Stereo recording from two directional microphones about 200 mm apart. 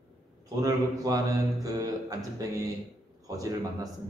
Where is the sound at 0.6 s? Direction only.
20° right (ahead or behind).